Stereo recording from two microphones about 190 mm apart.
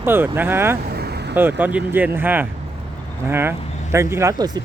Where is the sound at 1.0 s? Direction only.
60° right (ahead or behind).